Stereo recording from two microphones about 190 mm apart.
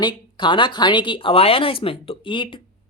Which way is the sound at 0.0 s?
25° left (ahead or behind).